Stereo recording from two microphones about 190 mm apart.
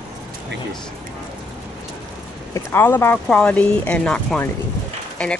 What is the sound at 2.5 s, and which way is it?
Speech, 10° left (ahead or behind).